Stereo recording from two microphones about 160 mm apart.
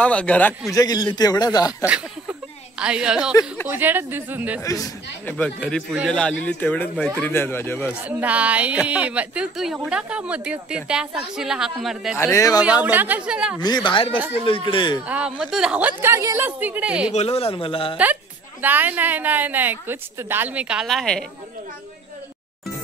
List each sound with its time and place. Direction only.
0.0 s a man's voice: 5° left (ahead or behind)
0.7 s a man's voice: 25° left (ahead or behind)
1.9 s a woman's voice: 5° right (ahead or behind)
4.6 s a man's voice: 20° left (ahead or behind)
5.2 s a man's voice: 5° left (ahead or behind)
8.0 s speech: 10° right (ahead or behind)
12.2 s a man's voice: 20° left (ahead or behind)
12.8 s speech: 10° right (ahead or behind)
13.6 s a man's voice: 25° left (ahead or behind)
15.0 s speech: 10° right (ahead or behind)
17.1 s a man's voice: 40° left (ahead or behind)
18.6 s speech: 10° right (ahead or behind)